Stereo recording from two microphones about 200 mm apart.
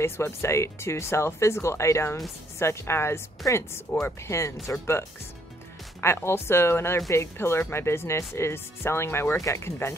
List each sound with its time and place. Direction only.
0.0 s speech: 15° left (ahead or behind)